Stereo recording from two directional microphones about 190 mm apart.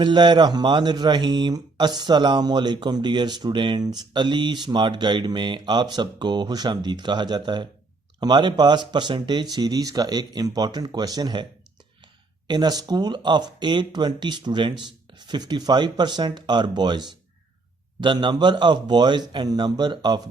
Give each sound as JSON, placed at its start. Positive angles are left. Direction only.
{"t": 0.0, "sound": "speech", "side_deg": -25}
{"t": 12.5, "sound": "speech", "side_deg": -20}